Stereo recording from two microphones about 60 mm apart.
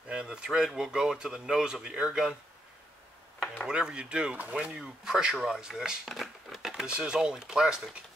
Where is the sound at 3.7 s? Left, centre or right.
Centre.